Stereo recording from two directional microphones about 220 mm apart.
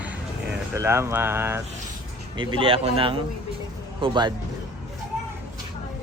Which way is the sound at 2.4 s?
20° right (ahead or behind).